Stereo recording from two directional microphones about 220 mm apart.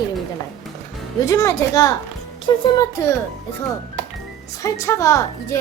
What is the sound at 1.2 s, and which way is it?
Music, 15° left (ahead or behind).